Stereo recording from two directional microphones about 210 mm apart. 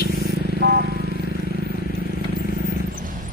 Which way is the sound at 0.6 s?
45° right (ahead or behind).